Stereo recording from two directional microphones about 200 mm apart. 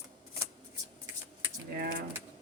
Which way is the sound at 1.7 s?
50° right (ahead or behind).